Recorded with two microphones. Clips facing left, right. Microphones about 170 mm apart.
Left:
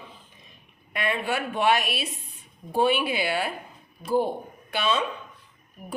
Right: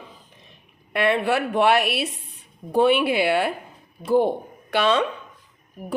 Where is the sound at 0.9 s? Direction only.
70° right (ahead or behind).